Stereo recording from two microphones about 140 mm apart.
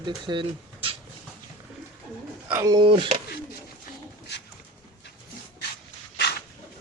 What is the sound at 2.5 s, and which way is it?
Speech, 20° right (ahead or behind).